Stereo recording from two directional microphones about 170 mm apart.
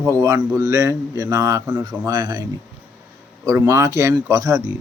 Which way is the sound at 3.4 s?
15° right (ahead or behind).